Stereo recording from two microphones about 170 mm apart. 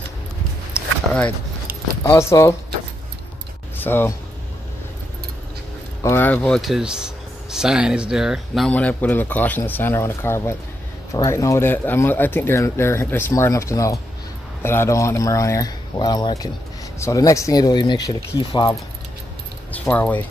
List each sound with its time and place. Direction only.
0.8 s a sound: 5° right (ahead or behind)
2.0 s speech: 15° left (ahead or behind)
3.7 s speech: 10° left (ahead or behind)
6.0 s speech: 10° left (ahead or behind)
19.7 s speech: 10° left (ahead or behind)